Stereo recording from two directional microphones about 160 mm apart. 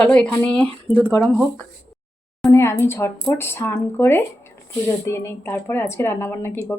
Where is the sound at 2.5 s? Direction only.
15° left (ahead or behind).